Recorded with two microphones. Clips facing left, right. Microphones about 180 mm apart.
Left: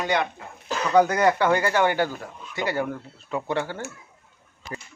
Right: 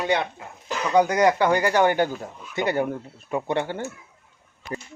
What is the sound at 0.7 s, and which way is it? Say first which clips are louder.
Speech: left 1 dB; 15° right (ahead or behind).